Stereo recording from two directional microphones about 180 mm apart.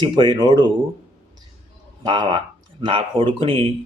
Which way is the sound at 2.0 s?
25° right (ahead or behind).